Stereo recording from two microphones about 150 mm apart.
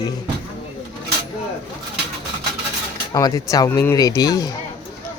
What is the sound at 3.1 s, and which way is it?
Speech, 20° left (ahead or behind).